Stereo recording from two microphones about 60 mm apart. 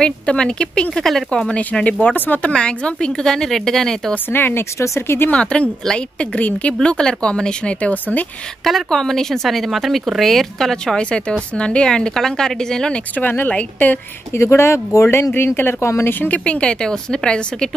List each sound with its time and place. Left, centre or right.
0.0 s a woman's voice: centre
2.5 s a woman's voice: centre
4.3 s speech: left
4.7 s speech: left
5.3 s a woman's voice: centre
8.6 s speech: centre
11.0 s a woman's voice: centre
13.1 s speech: left
14.3 s speech: left
15.3 s speech: left
16.4 s a woman's voice: centre